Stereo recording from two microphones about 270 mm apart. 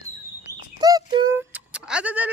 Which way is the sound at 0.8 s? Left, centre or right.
Centre.